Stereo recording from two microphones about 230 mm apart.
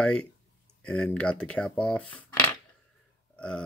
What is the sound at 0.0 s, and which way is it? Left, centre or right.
Speech, centre.